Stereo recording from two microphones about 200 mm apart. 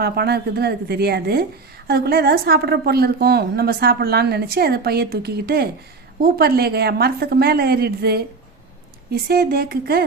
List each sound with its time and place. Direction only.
0.0 s a woman's voice: 55° right (ahead or behind)